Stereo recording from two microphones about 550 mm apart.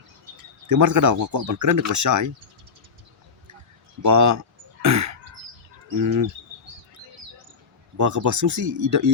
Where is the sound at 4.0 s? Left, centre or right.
Right.